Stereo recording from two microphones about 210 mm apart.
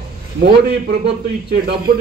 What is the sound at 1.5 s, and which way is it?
Speech, 50° right (ahead or behind).